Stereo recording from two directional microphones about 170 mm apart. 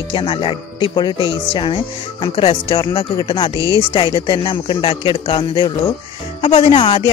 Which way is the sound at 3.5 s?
20° right (ahead or behind).